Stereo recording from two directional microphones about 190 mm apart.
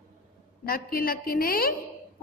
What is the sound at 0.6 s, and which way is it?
A woman's voice, 50° left (ahead or behind).